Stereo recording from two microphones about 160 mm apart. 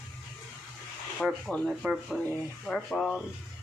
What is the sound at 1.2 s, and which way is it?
Speech, centre (ahead or behind).